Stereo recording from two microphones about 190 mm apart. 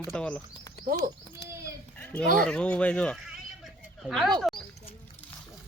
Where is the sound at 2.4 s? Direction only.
5° left (ahead or behind).